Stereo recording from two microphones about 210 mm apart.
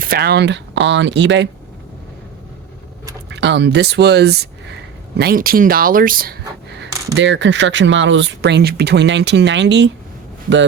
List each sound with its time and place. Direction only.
0.0 s speech: 45° right (ahead or behind)
3.2 s speech: 55° right (ahead or behind)
7.1 s speech: 60° right (ahead or behind)